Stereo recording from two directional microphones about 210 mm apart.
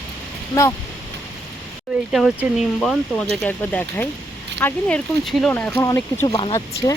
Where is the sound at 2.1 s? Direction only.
Centre (ahead or behind).